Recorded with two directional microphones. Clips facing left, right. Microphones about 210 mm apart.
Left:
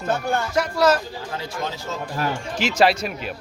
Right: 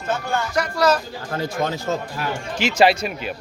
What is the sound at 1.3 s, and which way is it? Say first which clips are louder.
Speech: right 7 dB; 50° right (ahead or behind).